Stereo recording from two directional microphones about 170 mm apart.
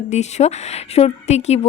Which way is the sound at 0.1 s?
40° left (ahead or behind).